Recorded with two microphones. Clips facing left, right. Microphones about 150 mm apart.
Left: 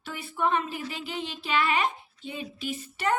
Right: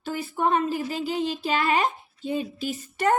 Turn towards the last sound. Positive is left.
turn(degrees=-40)  # may be behind; listen again after turning